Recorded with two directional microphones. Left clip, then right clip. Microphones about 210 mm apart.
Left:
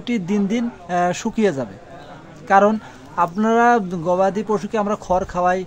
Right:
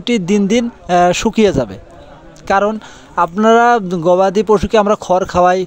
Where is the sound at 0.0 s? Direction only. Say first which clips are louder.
Right 8 dB; 35° right (ahead or behind).